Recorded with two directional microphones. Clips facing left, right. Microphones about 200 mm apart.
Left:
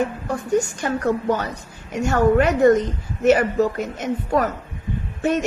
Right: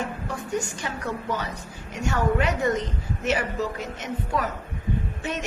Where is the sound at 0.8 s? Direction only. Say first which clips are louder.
Left 10 dB; 50° left (ahead or behind).